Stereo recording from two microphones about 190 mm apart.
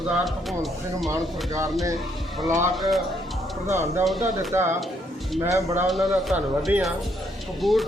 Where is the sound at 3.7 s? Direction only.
15° right (ahead or behind).